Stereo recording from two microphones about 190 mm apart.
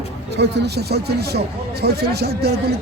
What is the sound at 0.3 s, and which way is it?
Speech, 60° right (ahead or behind).